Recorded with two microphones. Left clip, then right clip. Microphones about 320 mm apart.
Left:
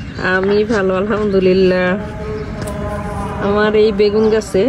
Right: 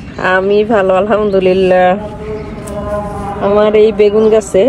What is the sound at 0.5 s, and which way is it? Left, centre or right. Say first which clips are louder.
A man's voice: right 5 dB; right.